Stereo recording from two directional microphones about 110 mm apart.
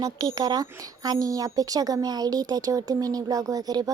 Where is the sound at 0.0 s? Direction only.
35° right (ahead or behind).